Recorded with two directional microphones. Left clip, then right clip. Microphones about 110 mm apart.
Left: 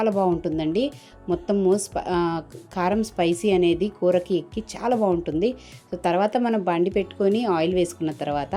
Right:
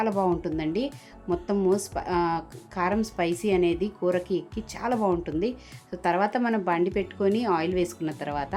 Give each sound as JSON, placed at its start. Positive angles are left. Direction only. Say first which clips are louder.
{"t": 0.3, "sound": "a woman's voice", "louder": "left 3 dB", "side_deg": 30}